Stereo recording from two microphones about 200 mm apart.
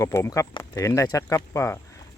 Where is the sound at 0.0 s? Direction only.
15° left (ahead or behind).